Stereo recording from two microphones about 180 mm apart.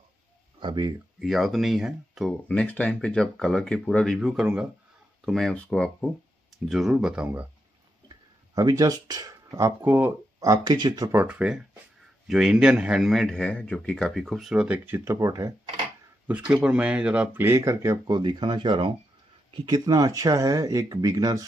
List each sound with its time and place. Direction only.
0.6 s speech: 25° right (ahead or behind)
1.2 s speech: centre (ahead or behind)
8.1 s speech: 20° right (ahead or behind)
11.1 s speech: 5° right (ahead or behind)
16.3 s speech: 10° right (ahead or behind)